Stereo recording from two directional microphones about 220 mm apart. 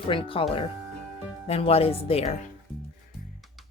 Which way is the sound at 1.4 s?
25° left (ahead or behind).